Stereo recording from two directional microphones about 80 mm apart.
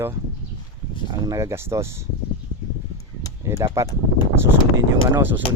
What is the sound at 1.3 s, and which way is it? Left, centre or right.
Speech, right.